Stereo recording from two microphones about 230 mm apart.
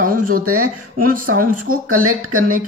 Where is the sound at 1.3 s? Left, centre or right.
Right.